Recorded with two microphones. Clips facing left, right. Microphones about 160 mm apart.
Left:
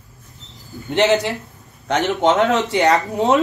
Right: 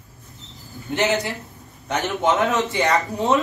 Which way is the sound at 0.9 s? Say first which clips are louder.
Left 5 dB; 70° left (ahead or behind).